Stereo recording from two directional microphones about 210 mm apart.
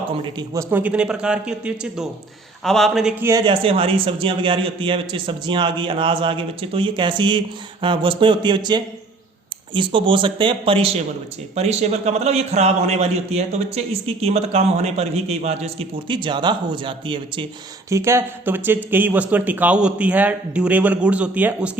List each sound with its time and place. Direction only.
0.3 s speech: 10° right (ahead or behind)
3.2 s a man's voice: 20° right (ahead or behind)
17.8 s speech: 15° right (ahead or behind)